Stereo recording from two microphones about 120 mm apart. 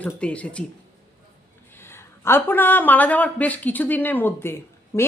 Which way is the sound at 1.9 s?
20° left (ahead or behind).